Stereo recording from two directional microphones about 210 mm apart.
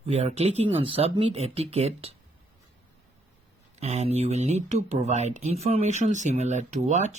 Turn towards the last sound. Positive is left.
turn(degrees=-35)  # may be behind; listen again after turning